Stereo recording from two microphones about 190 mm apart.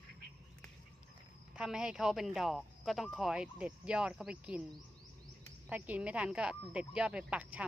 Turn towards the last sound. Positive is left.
turn(degrees=-5)  # may be behind; listen again after turning